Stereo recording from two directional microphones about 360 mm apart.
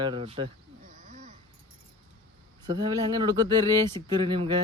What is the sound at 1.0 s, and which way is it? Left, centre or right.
Dog, right.